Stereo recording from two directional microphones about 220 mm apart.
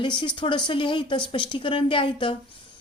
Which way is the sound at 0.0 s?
20° left (ahead or behind).